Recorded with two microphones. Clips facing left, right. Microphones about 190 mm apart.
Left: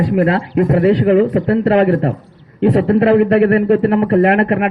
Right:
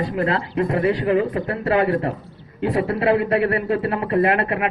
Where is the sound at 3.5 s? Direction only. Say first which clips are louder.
Left 9 dB; 60° left (ahead or behind).